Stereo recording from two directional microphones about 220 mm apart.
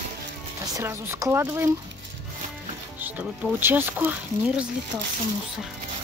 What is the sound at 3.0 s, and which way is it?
Speech, 5° right (ahead or behind).